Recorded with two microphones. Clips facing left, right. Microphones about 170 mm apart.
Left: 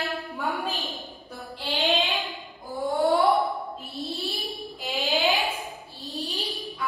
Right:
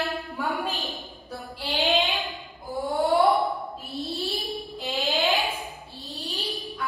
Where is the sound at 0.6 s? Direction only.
Centre (ahead or behind).